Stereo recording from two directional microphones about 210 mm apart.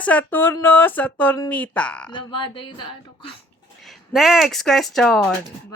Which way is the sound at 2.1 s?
20° left (ahead or behind).